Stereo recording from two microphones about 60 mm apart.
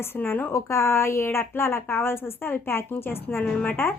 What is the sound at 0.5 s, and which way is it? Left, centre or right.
A woman's voice, left.